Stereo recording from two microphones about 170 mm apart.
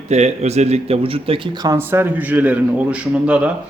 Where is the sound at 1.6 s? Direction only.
15° right (ahead or behind).